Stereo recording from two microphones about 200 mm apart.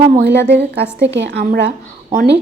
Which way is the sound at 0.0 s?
55° right (ahead or behind).